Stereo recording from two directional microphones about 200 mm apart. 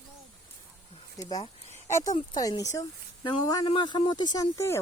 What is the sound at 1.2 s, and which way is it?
Speech, 15° left (ahead or behind).